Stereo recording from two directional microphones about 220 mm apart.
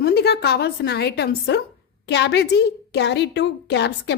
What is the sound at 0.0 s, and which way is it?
A woman's voice, 45° left (ahead or behind).